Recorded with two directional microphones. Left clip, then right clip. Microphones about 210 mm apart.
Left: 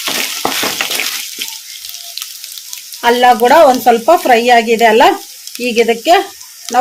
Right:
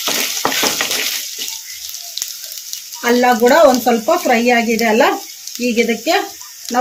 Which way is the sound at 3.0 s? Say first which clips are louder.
Left 4 dB; 40° left (ahead or behind).